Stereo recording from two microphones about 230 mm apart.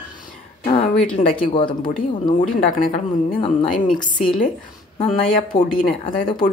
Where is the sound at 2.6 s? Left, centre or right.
Left.